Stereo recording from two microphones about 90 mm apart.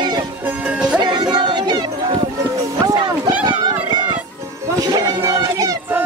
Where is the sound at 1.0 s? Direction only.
50° right (ahead or behind).